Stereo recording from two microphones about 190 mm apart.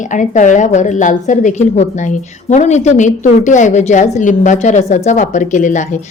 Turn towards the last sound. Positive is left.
turn(degrees=40)  # may be behind; listen again after turning